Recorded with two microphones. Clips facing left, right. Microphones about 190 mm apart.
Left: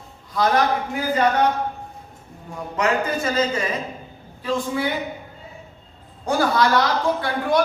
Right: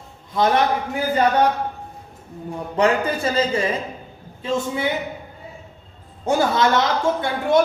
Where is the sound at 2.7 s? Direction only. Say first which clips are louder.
Right 3 dB; 30° right (ahead or behind).